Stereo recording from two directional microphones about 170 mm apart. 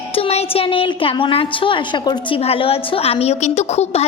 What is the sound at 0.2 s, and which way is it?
A woman's voice, 35° left (ahead or behind).